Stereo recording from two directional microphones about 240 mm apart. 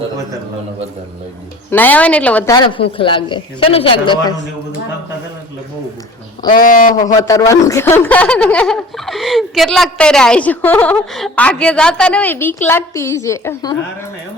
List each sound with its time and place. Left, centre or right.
1.7 s speech: centre
2.6 s speech: left
6.5 s speech: left
7.2 s a woman's voice: centre